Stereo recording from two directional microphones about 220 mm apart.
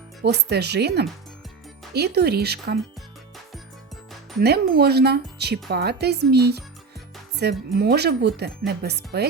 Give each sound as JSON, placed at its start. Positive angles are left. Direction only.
{"t": 0.2, "sound": "a woman's voice", "side_deg": -50}
{"t": 4.4, "sound": "a woman's voice", "side_deg": -45}
{"t": 7.7, "sound": "a woman's voice", "side_deg": -45}